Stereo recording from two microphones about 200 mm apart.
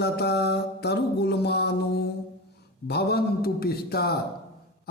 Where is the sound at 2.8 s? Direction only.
55° left (ahead or behind).